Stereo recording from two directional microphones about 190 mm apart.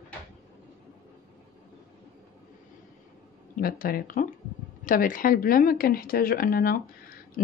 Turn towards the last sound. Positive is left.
turn(degrees=50)  # may be behind; listen again after turning